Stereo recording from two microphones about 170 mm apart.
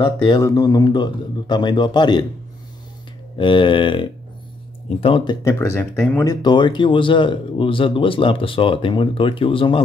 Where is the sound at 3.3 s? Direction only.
30° left (ahead or behind).